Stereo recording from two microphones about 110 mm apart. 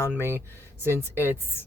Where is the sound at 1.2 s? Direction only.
20° left (ahead or behind).